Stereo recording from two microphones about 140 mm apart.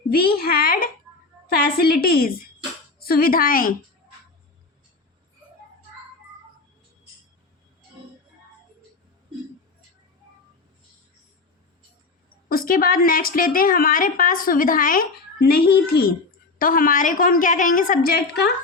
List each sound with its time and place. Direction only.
0.1 s a child's voice: 90° left
12.5 s a woman's voice: 90° left
15.5 s a woman's voice: 90° left